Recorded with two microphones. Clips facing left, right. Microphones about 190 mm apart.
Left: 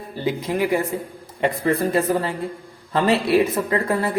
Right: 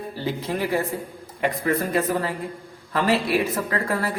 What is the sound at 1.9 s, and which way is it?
Speech, 30° left (ahead or behind).